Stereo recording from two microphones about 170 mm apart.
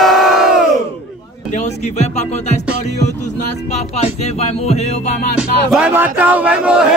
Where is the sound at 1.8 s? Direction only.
40° left (ahead or behind).